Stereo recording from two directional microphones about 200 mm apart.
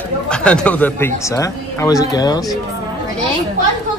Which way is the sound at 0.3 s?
5° left (ahead or behind).